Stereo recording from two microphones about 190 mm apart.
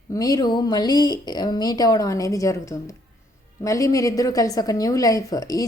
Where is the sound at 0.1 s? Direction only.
20° left (ahead or behind).